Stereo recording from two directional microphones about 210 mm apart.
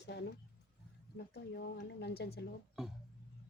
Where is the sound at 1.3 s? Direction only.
50° left (ahead or behind).